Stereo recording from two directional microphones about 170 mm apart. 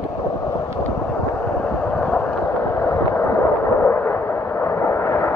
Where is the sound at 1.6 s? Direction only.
5° left (ahead or behind).